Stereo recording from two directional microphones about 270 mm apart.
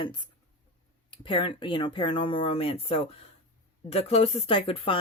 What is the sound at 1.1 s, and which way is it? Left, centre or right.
Speech, centre.